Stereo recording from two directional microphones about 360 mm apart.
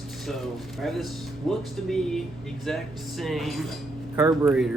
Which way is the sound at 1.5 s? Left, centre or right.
Centre.